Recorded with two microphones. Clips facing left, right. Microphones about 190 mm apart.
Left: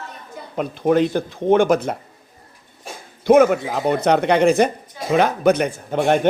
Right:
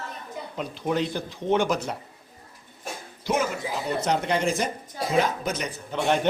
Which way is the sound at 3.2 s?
60° left (ahead or behind).